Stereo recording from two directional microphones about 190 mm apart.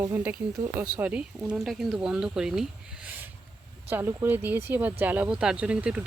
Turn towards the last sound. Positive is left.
turn(degrees=-5)  # may be behind; listen again after turning